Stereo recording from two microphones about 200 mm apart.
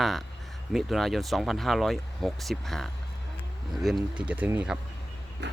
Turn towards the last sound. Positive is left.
turn(degrees=-60)  # may be behind; listen again after turning